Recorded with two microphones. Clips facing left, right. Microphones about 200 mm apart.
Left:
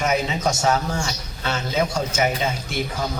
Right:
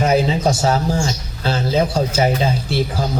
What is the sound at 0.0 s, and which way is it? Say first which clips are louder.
A man's voice: right 6 dB; 35° right (ahead or behind).